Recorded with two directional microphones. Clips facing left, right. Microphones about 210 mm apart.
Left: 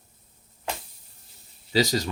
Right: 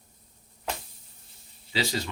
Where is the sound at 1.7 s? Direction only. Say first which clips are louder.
Left 6 dB; 40° left (ahead or behind).